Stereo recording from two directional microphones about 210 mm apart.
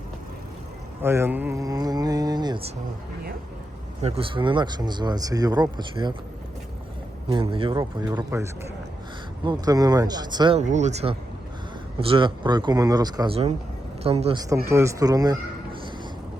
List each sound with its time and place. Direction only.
1.0 s speech: 10° right (ahead or behind)
4.0 s speech: 25° right (ahead or behind)
7.3 s speech: 25° right (ahead or behind)
10.6 s speech: 35° right (ahead or behind)
14.5 s speech: 15° right (ahead or behind)